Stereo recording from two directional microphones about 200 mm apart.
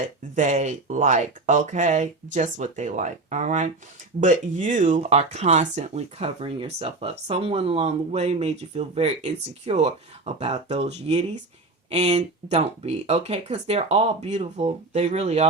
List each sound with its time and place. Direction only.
0.3 s speech: 35° right (ahead or behind)